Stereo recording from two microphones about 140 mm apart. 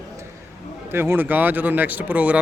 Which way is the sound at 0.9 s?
15° right (ahead or behind).